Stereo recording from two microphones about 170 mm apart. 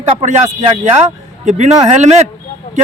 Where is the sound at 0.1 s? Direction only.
35° right (ahead or behind).